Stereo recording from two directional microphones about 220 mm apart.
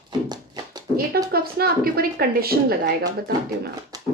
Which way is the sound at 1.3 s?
45° right (ahead or behind).